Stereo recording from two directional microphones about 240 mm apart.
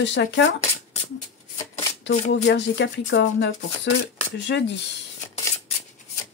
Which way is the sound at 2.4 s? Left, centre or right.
Left.